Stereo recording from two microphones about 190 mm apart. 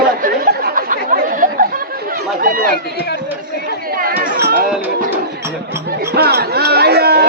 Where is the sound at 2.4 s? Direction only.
45° right (ahead or behind).